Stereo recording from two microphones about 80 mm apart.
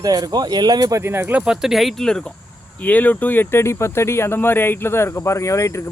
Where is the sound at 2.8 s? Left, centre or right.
Centre.